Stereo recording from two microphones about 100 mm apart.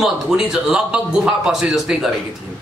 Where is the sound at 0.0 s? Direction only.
5° right (ahead or behind).